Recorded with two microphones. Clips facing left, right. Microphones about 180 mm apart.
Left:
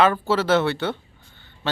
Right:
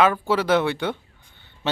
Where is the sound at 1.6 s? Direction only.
20° right (ahead or behind).